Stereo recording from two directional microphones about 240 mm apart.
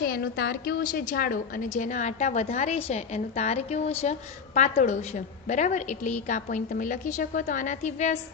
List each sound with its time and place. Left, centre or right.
0.0 s a woman's voice: left